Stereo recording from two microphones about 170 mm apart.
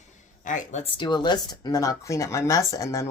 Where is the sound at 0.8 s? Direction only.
25° left (ahead or behind).